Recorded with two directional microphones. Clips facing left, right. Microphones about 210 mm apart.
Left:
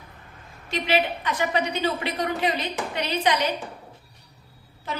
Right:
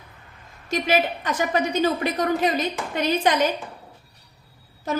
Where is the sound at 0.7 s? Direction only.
45° right (ahead or behind).